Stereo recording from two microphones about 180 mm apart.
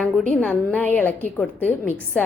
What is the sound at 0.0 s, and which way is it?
A woman's voice, 5° left (ahead or behind).